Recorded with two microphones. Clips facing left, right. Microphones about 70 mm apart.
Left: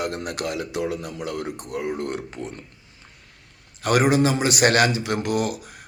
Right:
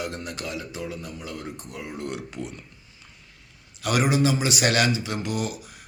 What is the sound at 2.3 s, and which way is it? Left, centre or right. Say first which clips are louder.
Speech: left 2 dB; left.